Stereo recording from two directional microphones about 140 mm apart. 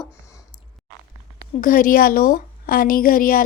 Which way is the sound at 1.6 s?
75° left (ahead or behind).